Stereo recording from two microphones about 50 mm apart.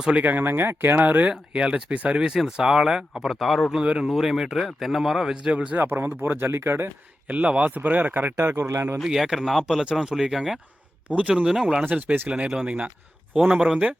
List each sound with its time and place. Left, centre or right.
0.2 s speech: right
1.3 s speech: centre
3.7 s speech: centre
5.3 s speech: centre
5.7 s speech: right
7.3 s speech: right
8.4 s speech: right
8.7 s speech: right
9.0 s speech: centre
11.1 s speech: right
11.4 s speech: centre
11.9 s speech: right